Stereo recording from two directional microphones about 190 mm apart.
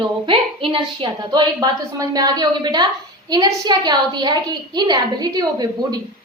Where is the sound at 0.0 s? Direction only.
30° right (ahead or behind).